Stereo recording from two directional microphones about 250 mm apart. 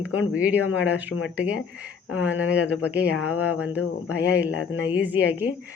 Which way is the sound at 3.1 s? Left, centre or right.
Left.